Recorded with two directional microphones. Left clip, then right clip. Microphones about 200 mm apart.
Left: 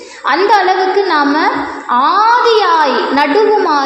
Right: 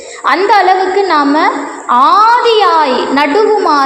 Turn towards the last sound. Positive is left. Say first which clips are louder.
# right 2 dB
turn(degrees=-30)  # may be behind; listen again after turning